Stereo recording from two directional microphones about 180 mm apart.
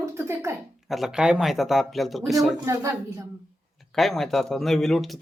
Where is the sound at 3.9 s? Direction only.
Centre (ahead or behind).